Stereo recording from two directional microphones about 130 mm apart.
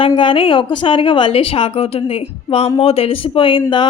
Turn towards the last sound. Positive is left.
turn(degrees=40)  # may be behind; listen again after turning